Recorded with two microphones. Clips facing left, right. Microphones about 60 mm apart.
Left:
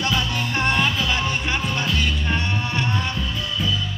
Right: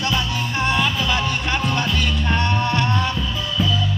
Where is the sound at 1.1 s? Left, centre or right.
Centre.